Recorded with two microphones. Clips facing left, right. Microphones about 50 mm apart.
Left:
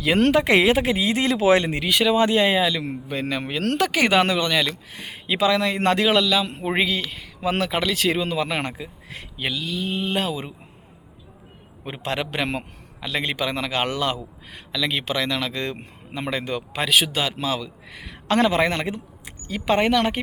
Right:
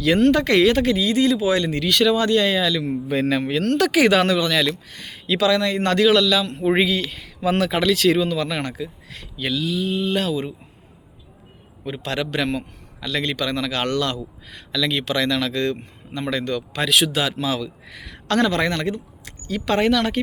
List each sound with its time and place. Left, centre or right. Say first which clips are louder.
0.3 s speech: even; left
1.7 s a man's voice: right 1 dB; centre
3.1 s a man's voice: right 6 dB; centre
6.7 s a man's voice: right 7 dB; centre
8.4 s speech: right 1 dB; left
9.4 s a man's voice: right 4 dB; centre
9.9 s speech: right 3 dB; left
10.2 s a man's voice: right 3 dB; centre
12.0 s a man's voice: right 2 dB; centre
17.8 s speech: left 1 dB; centre